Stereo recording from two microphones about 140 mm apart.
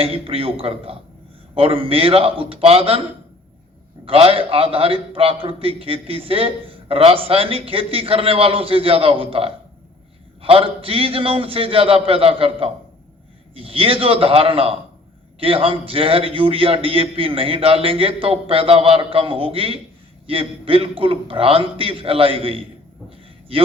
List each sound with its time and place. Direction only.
0.0 s a man's voice: 45° right (ahead or behind)